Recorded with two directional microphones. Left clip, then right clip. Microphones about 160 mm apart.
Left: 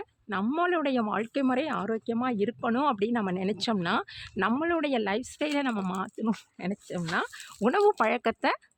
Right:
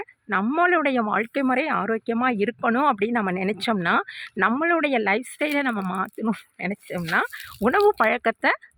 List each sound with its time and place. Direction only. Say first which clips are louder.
0.0 s speech: right 7 dB; 30° right (ahead or behind)